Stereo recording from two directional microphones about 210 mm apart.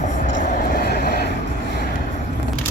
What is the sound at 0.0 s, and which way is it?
Vehicle, 35° left (ahead or behind).